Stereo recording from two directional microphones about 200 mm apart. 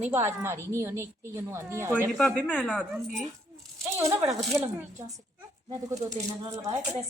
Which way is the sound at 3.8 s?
15° right (ahead or behind).